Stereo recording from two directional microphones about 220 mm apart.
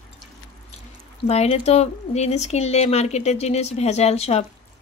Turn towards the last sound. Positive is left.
turn(degrees=30)  # may be behind; listen again after turning